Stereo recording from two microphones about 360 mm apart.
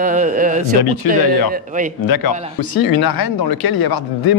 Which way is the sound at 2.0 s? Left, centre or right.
Left.